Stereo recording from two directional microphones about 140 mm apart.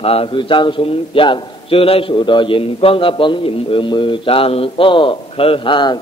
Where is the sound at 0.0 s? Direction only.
45° left (ahead or behind).